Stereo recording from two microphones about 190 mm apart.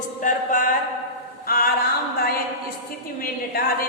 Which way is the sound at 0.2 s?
45° left (ahead or behind).